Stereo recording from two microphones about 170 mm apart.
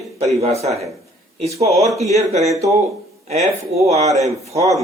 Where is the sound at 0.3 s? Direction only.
40° right (ahead or behind).